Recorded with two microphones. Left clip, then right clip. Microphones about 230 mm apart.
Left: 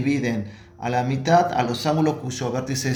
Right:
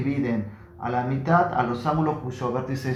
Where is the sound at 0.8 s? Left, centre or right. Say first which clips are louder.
Left 3 dB; left.